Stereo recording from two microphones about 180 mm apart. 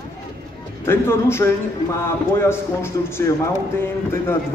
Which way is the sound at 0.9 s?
15° left (ahead or behind).